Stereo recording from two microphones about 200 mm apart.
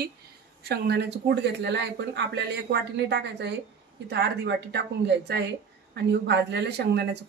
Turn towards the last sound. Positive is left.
turn(degrees=-55)  # may be behind; listen again after turning